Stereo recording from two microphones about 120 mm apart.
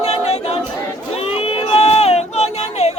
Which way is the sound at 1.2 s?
55° left (ahead or behind).